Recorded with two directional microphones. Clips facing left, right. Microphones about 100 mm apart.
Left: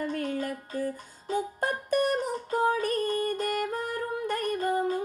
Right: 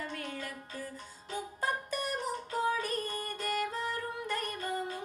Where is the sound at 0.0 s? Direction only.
50° left (ahead or behind).